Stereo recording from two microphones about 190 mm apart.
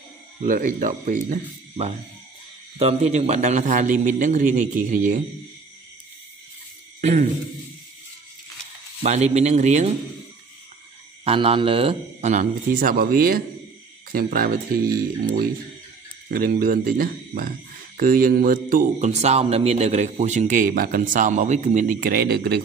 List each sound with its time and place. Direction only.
0.4 s a man's voice: 45° right (ahead or behind)
2.8 s a man's voice: 35° right (ahead or behind)
7.0 s speech: 35° right (ahead or behind)
9.0 s a man's voice: 35° right (ahead or behind)
11.2 s a man's voice: 30° right (ahead or behind); by 22.6 s 55° right (ahead or behind)